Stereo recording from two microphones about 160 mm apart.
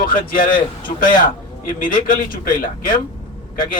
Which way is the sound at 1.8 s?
60° left (ahead or behind).